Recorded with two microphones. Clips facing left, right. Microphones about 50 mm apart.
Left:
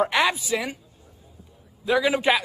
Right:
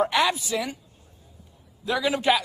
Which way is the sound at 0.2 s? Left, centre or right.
Centre.